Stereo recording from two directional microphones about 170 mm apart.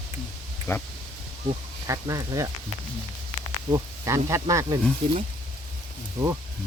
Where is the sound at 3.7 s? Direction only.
20° right (ahead or behind).